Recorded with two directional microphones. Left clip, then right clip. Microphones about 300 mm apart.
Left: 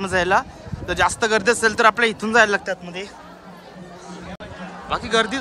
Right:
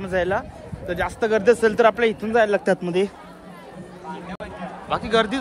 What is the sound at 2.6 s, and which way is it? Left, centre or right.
Speech, centre.